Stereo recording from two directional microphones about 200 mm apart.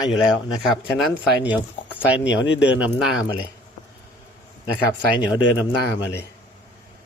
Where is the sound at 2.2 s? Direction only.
60° left (ahead or behind).